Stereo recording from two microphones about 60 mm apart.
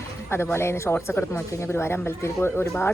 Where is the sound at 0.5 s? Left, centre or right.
Left.